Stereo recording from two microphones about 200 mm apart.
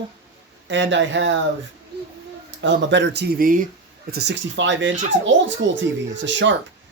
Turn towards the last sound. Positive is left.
turn(degrees=-65)  # may be behind; listen again after turning